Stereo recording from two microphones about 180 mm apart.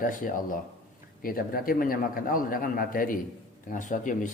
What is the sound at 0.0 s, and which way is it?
A man's voice, 50° left (ahead or behind).